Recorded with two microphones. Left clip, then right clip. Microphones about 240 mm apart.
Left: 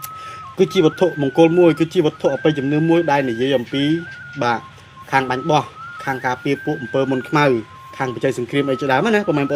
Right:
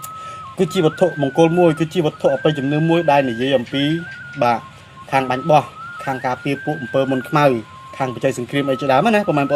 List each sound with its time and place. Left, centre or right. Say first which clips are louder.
0.6 s speech: left 1 dB; left